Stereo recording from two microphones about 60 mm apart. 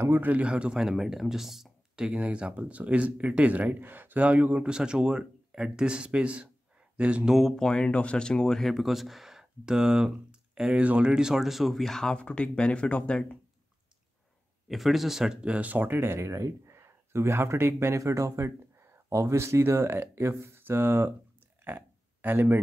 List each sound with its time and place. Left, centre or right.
0.0 s speech: right
7.2 s speech: centre
7.5 s speech: centre
14.7 s speech: centre; by 16.0 s right
16.0 s a man's voice: right
21.6 s a sound: right